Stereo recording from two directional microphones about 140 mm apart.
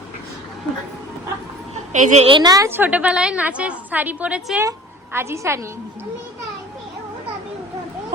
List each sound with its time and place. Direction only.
1.7 s dog: 55° right (ahead or behind)
2.2 s a woman's voice: 35° right (ahead or behind)
2.6 s a woman's voice: 15° right (ahead or behind)
5.1 s a woman's voice: 20° right (ahead or behind)